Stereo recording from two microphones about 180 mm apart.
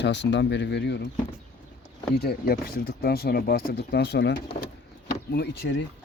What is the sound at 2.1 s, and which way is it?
Speech, 65° left (ahead or behind).